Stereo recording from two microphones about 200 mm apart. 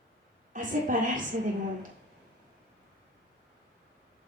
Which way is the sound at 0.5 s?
40° right (ahead or behind).